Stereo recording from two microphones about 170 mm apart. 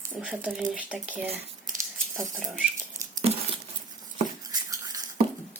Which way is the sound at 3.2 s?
35° right (ahead or behind).